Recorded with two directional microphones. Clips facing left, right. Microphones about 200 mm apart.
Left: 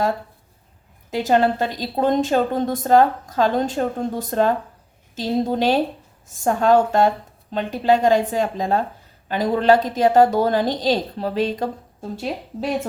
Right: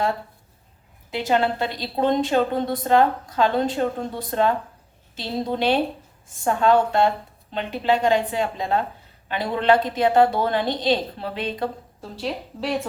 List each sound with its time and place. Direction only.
1.1 s a woman's voice: 45° left (ahead or behind)